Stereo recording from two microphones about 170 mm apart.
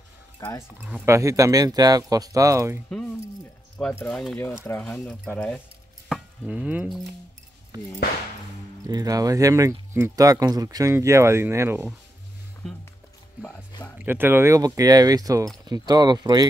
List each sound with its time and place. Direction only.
0.4 s speech: 15° left (ahead or behind)
0.7 s speech: 10° right (ahead or behind)
3.7 s speech: 10° left (ahead or behind)
6.0 s chopping: 5° right (ahead or behind)
7.7 s speech: 20° right (ahead or behind)
13.9 s speech: 10° right (ahead or behind)